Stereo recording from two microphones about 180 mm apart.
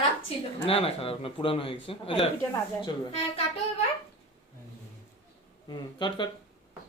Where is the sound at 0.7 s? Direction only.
35° left (ahead or behind).